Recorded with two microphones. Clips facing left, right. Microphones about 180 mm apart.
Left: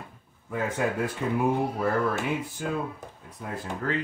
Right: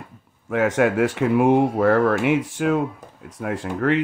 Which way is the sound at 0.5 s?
80° right.